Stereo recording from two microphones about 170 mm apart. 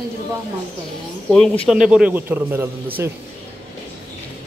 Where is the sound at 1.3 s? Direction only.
5° left (ahead or behind); by 3.1 s 10° right (ahead or behind).